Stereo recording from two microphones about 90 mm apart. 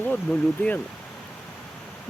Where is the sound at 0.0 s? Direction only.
15° left (ahead or behind).